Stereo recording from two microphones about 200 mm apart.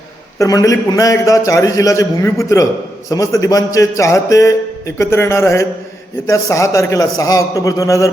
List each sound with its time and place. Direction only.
0.3 s a man's voice: 15° left (ahead or behind)